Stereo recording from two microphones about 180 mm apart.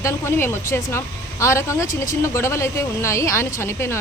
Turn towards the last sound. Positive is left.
turn(degrees=15)  # may be behind; listen again after turning